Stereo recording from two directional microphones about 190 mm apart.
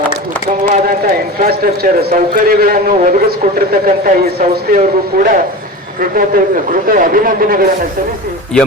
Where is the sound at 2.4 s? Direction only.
50° right (ahead or behind).